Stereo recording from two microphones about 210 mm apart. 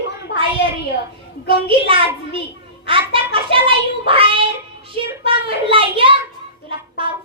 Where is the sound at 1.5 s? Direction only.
25° right (ahead or behind).